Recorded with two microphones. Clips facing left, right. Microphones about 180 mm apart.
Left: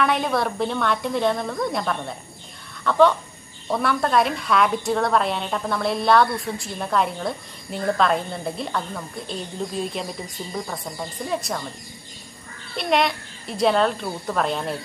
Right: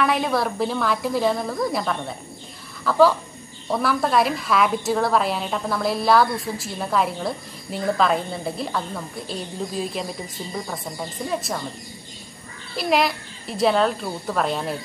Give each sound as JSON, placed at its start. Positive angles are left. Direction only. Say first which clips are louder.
{"t": 0.0, "sound": "a woman's voice", "louder": "even", "side_deg": 0}
{"t": 12.7, "sound": "a woman's voice", "louder": "even", "side_deg": 0}